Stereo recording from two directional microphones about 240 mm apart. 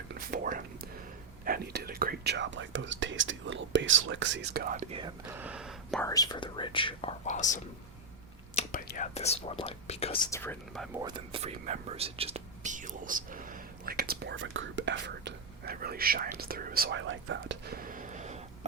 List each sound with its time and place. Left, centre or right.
0.1 s a sound: right
1.5 s speech: right
5.3 s speech: centre
6.1 s speech: centre
8.5 s whispering: left
9.1 s speech: left
10.3 s speech: centre
11.0 s speech: right